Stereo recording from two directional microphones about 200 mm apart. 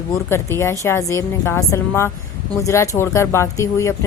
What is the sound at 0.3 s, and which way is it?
A woman's voice, 10° left (ahead or behind).